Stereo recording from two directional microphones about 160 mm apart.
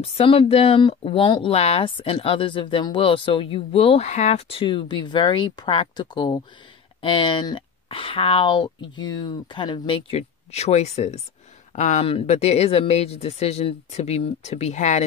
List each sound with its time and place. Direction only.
0.0 s speech: 35° left (ahead or behind)
12.1 s speech: 40° left (ahead or behind)